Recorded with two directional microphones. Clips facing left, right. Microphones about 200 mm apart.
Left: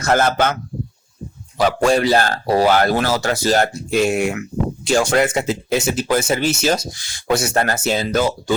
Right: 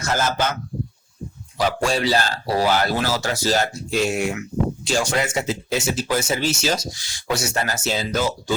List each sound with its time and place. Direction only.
0.0 s speech: 60° left (ahead or behind)
1.5 s speech: 55° left (ahead or behind)